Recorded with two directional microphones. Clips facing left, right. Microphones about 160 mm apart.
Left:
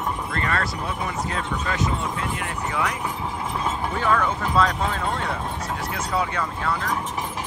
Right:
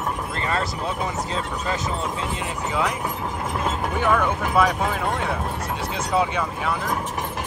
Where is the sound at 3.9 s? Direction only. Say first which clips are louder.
Right 1 dB; 15° right (ahead or behind).